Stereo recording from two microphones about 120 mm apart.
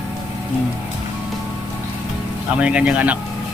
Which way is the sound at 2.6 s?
10° right (ahead or behind).